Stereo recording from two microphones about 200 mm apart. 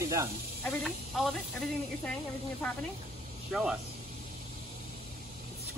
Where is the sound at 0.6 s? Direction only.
Centre (ahead or behind).